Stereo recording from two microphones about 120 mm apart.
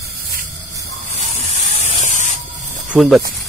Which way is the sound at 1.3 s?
85° left.